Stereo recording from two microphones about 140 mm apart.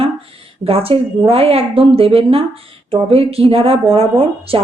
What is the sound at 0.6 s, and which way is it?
A woman's voice, 45° right (ahead or behind).